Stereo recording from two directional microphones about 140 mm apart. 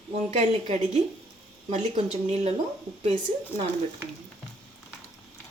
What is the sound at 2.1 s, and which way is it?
A woman's voice, 50° right (ahead or behind).